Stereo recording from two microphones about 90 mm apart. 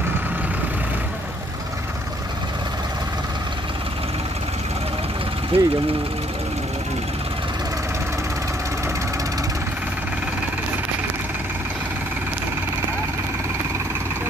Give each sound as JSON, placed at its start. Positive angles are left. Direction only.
{"t": 5.5, "sound": "speech", "side_deg": -90}